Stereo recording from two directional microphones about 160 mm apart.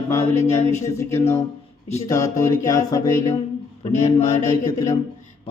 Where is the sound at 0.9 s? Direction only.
15° left (ahead or behind).